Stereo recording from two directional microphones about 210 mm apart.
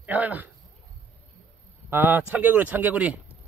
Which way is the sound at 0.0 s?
10° right (ahead or behind).